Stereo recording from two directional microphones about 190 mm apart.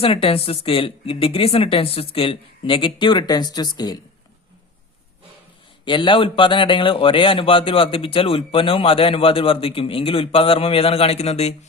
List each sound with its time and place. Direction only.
0.0 s a man's voice: 30° left (ahead or behind)
5.8 s a man's voice: 25° left (ahead or behind)